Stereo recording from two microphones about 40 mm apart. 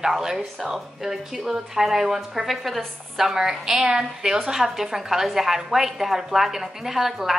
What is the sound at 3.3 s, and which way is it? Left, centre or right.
Speech, centre.